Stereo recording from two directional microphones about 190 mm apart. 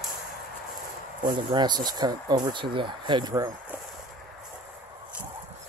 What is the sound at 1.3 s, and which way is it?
Speech, 25° right (ahead or behind).